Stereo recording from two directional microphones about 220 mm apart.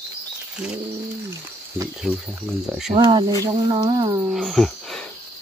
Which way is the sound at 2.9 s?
25° right (ahead or behind).